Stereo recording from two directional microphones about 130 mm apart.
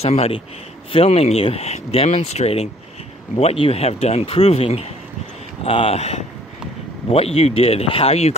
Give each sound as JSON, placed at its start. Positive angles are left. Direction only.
{"t": 0.0, "sound": "speech", "side_deg": 50}